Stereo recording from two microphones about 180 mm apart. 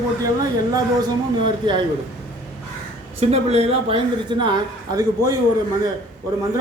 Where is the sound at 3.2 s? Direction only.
35° right (ahead or behind).